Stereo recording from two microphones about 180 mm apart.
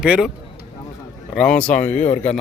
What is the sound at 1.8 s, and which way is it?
Speech, 40° left (ahead or behind).